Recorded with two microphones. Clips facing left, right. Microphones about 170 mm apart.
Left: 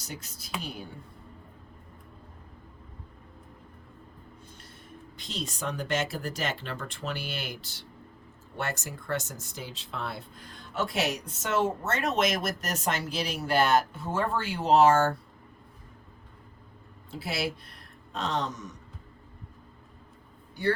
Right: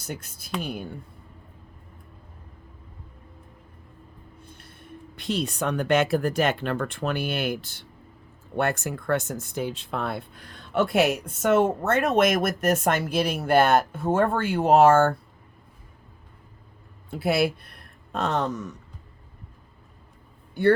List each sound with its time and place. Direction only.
0.0 s speech: 55° right (ahead or behind)
4.4 s a sound: 60° right (ahead or behind)
5.1 s speech: 60° right (ahead or behind)
17.1 s speech: 55° right (ahead or behind)